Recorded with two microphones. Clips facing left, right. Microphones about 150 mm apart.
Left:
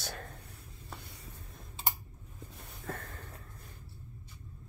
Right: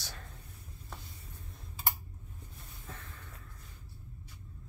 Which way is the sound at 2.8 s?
55° left (ahead or behind).